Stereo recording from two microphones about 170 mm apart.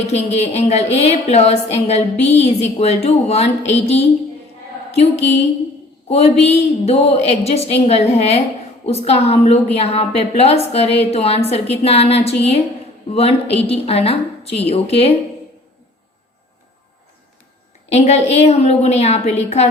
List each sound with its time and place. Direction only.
0.1 s a woman's voice: 40° left (ahead or behind)
17.8 s a woman's voice: 40° left (ahead or behind)